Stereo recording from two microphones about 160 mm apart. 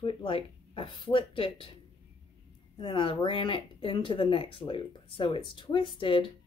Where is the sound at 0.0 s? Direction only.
35° left (ahead or behind).